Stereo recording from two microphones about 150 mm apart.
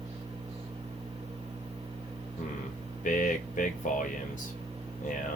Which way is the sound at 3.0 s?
60° left (ahead or behind).